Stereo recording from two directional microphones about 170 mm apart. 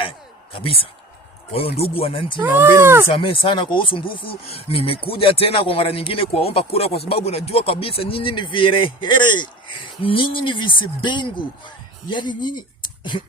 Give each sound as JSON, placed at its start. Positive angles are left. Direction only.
{"t": 0.5, "sound": "speech", "side_deg": 35}
{"t": 2.4, "sound": "speech", "side_deg": -15}
{"t": 3.1, "sound": "speech", "side_deg": 30}